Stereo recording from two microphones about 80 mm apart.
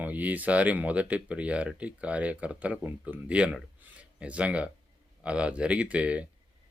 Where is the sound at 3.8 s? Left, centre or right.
Centre.